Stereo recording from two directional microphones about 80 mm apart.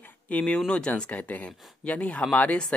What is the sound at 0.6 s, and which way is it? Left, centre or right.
Speech, centre.